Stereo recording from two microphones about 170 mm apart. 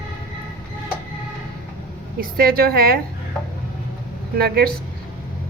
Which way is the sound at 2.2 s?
60° right (ahead or behind).